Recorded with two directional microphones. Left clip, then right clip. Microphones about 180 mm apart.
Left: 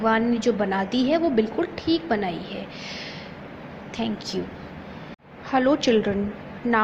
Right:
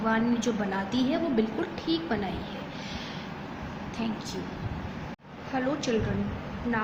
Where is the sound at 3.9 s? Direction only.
40° left (ahead or behind).